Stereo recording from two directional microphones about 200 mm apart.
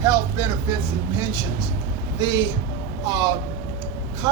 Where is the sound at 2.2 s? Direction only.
20° right (ahead or behind).